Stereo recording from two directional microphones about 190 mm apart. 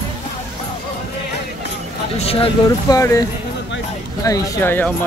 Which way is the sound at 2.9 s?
15° left (ahead or behind).